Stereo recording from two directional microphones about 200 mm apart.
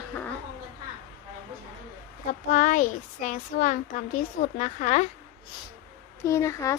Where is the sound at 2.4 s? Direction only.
40° left (ahead or behind).